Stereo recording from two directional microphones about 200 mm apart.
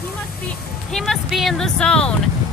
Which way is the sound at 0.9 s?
Centre (ahead or behind).